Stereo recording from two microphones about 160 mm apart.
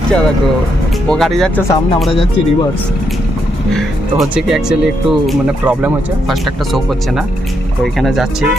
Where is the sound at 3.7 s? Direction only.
Centre (ahead or behind).